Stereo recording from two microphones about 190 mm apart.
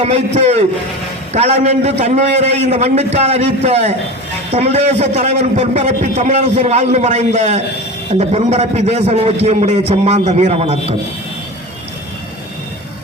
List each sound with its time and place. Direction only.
0.0 s a man's voice: 35° right (ahead or behind)